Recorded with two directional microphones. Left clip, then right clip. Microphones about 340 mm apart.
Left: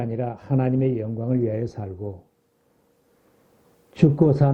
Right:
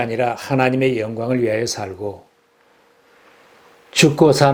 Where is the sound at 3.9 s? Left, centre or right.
Centre.